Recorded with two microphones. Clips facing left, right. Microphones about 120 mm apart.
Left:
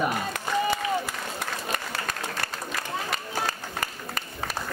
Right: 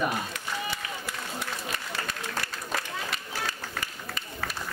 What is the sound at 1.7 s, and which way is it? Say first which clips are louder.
Applause: left 3 dB; 45° left (ahead or behind).